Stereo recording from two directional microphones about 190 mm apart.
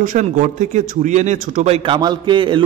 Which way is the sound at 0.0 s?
45° right (ahead or behind).